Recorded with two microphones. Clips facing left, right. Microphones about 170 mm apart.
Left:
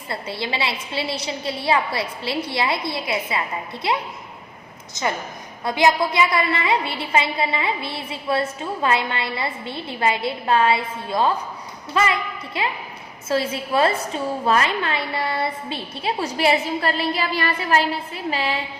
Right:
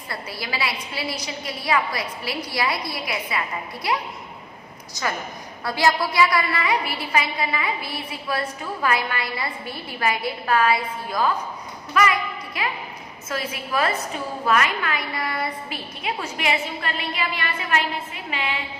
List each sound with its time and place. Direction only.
0.1 s a woman's voice: 25° left (ahead or behind)